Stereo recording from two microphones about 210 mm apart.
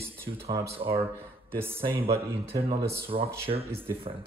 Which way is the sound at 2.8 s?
10° right (ahead or behind).